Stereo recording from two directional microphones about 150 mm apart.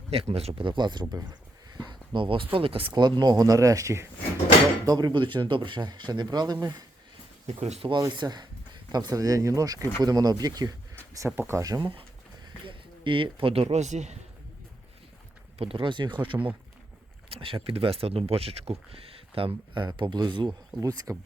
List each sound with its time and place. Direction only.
0.1 s speech: 40° right (ahead or behind)
7.4 s speech: 45° right (ahead or behind)
7.9 s speech: 30° right (ahead or behind); by 14.2 s 50° right (ahead or behind)
15.5 s speech: 40° right (ahead or behind)